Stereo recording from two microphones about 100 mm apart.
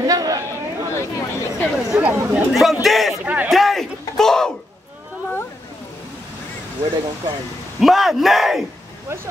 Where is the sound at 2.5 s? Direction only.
Centre (ahead or behind).